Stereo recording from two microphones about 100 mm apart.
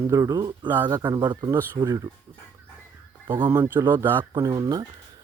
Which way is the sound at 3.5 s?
20° right (ahead or behind).